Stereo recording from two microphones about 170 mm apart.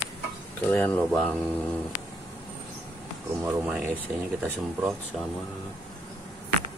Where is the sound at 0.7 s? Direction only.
10° left (ahead or behind).